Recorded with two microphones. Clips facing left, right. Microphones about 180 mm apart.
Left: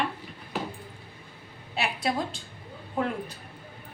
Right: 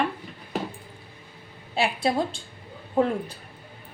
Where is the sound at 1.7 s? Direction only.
30° right (ahead or behind).